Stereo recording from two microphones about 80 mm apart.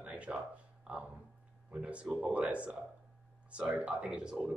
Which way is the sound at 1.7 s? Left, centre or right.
Centre.